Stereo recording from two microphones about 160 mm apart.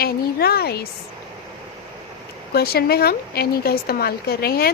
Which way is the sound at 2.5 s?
75° left (ahead or behind).